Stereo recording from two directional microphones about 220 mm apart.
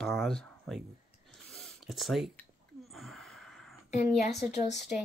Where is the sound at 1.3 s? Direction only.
Centre (ahead or behind).